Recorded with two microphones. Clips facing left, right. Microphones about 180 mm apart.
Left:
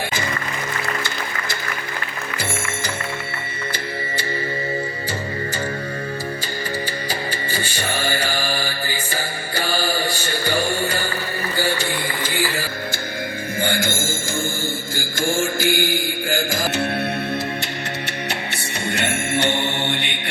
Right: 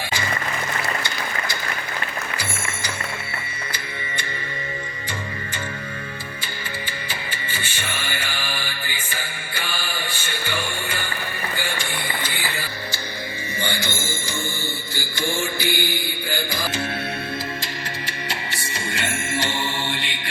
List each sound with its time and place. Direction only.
7.1 s music: 40° left (ahead or behind)
14.9 s mantra: 45° left (ahead or behind)
16.7 s music: 65° left (ahead or behind)